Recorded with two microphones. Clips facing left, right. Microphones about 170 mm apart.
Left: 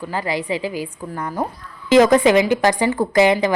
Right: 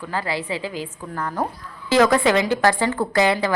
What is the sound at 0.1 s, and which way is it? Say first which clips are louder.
A woman's voice: left 3 dB; 15° left (ahead or behind).